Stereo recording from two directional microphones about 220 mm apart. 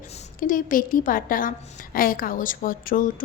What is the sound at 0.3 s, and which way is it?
A woman's voice, 35° left (ahead or behind).